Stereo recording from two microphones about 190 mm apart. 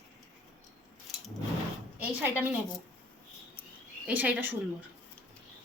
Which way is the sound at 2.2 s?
10° right (ahead or behind).